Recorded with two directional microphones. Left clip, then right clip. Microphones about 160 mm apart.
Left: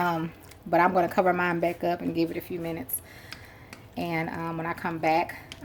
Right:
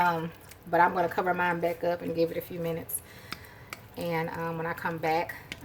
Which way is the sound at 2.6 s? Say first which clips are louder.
Right 4 dB; 35° left (ahead or behind).